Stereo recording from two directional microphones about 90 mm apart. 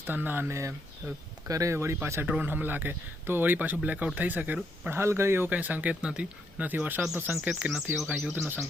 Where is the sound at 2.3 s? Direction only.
15° right (ahead or behind).